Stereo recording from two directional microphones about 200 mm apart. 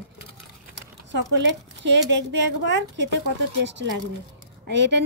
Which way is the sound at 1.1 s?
60° right (ahead or behind).